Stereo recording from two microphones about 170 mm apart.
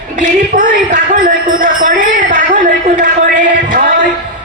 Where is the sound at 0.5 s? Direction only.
55° right (ahead or behind).